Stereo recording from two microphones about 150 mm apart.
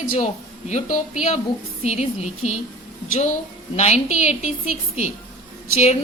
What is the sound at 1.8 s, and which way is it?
Speech, 45° left (ahead or behind).